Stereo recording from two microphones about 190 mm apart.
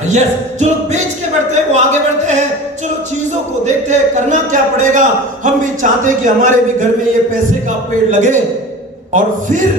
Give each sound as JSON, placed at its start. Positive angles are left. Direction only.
{"t": 0.1, "sound": "a man's voice", "side_deg": -35}
{"t": 3.6, "sound": "a man's voice", "side_deg": -40}